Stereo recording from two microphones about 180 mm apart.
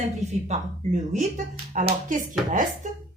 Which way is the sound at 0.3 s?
40° right (ahead or behind).